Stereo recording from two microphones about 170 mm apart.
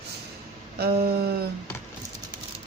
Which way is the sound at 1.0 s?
65° right (ahead or behind).